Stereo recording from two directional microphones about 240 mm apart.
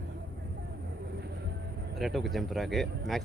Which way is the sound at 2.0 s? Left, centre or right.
Centre.